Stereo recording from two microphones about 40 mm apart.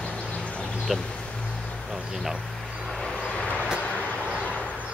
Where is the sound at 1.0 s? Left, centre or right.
Left.